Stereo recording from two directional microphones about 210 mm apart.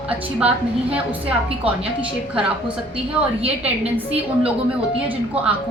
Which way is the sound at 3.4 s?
30° right (ahead or behind).